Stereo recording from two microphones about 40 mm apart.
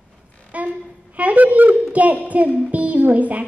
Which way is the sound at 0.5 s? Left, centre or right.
Right.